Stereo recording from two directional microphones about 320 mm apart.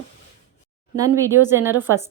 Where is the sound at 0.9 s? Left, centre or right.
Centre.